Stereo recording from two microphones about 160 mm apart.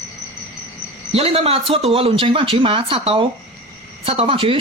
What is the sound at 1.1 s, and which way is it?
Speech, 40° right (ahead or behind).